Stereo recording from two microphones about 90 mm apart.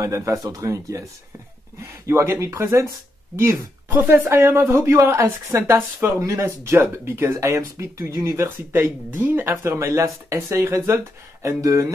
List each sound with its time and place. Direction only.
0.0 s speech: 35° right (ahead or behind)
5.8 s speech: 20° right (ahead or behind)